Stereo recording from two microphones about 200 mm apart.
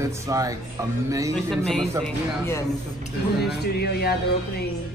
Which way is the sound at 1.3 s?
5° left (ahead or behind).